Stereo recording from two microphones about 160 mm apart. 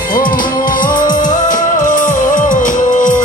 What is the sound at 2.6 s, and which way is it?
Music, 55° left (ahead or behind).